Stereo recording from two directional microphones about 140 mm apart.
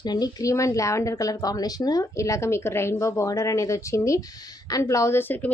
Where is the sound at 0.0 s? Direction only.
30° left (ahead or behind).